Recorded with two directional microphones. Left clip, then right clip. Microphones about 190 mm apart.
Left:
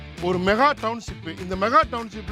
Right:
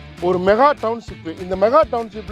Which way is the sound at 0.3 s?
35° left (ahead or behind).